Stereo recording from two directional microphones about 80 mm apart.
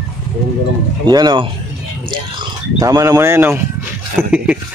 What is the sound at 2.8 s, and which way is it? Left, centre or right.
Speech, right.